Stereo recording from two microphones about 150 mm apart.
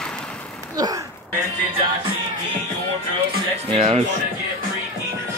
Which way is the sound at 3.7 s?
40° right (ahead or behind).